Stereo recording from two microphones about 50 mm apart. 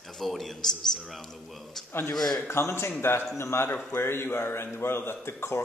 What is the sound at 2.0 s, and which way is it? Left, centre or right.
Speech, left.